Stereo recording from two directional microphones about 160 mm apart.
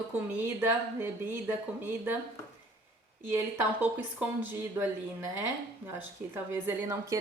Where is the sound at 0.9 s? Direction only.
15° right (ahead or behind).